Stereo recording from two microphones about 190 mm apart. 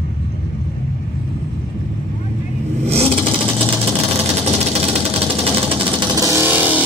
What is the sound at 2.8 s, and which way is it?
Vehicle, 35° right (ahead or behind).